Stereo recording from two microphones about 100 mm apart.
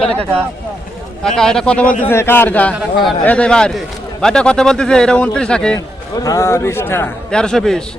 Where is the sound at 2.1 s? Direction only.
20° left (ahead or behind).